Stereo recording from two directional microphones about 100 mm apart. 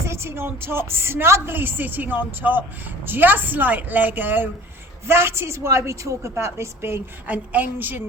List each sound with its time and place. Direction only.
0.0 s a woman's voice: 25° right (ahead or behind)